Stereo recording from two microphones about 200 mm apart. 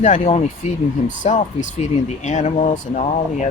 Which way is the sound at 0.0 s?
35° left (ahead or behind).